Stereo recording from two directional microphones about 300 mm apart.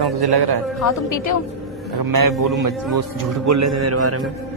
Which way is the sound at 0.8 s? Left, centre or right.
Left.